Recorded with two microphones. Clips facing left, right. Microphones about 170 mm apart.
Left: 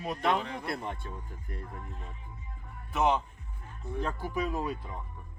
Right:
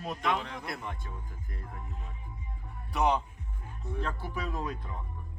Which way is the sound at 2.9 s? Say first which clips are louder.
Left 1 dB; centre (ahead or behind).